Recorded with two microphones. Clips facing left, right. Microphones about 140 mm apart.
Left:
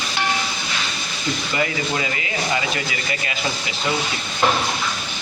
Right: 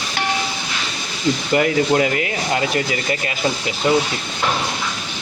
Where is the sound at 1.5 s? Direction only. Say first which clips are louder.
Right 8 dB; 60° right (ahead or behind).